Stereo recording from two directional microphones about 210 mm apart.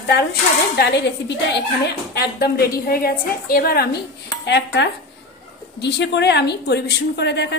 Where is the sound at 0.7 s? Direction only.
55° left (ahead or behind).